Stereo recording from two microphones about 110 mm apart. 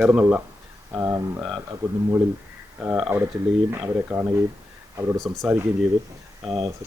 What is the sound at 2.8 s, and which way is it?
A man's voice, 5° right (ahead or behind).